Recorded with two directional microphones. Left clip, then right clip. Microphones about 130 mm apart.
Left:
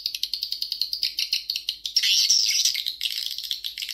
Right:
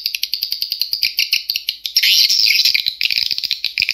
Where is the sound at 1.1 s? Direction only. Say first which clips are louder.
Right 9 dB; 45° right (ahead or behind).